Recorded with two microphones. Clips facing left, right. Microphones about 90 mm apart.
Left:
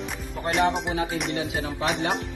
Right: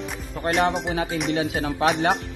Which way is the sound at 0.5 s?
Centre (ahead or behind).